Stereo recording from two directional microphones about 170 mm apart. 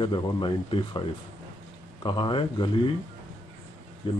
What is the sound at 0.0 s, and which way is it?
Speech, 25° left (ahead or behind).